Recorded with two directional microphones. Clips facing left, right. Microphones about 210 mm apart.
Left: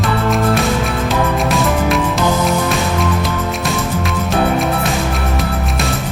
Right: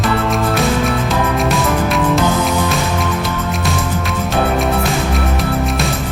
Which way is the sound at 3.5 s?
Centre (ahead or behind).